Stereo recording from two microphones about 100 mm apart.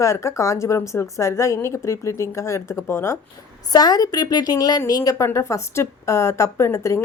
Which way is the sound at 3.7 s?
40° left (ahead or behind).